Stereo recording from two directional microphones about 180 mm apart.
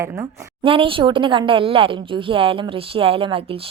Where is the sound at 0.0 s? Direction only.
15° right (ahead or behind).